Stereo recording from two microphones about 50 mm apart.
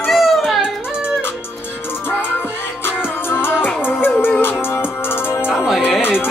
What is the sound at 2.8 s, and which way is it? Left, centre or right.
Music, left.